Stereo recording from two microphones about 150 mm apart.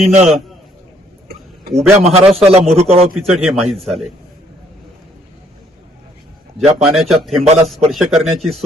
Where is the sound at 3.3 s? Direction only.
Centre (ahead or behind).